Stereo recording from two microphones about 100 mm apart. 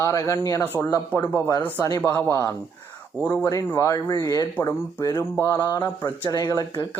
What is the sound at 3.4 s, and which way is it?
Speech, 30° left (ahead or behind).